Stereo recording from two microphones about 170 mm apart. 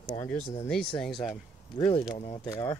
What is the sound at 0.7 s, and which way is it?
Speech, 5° left (ahead or behind).